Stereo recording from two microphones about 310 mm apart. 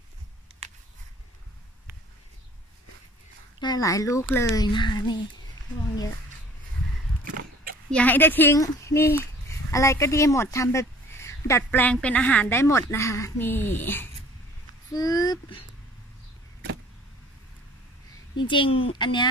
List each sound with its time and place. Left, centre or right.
3.5 s speech: centre
7.9 s speech: centre
18.3 s speech: centre